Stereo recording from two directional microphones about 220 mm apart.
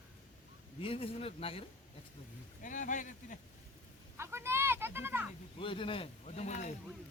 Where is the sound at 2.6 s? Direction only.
35° left (ahead or behind).